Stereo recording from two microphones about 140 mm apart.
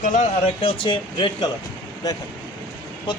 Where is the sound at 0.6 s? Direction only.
35° left (ahead or behind).